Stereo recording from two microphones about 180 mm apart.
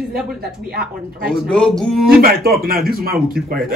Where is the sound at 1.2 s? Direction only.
5° left (ahead or behind).